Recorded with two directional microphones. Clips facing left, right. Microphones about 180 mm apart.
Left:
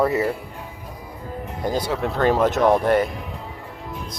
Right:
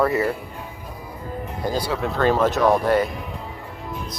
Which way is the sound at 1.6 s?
20° left (ahead or behind).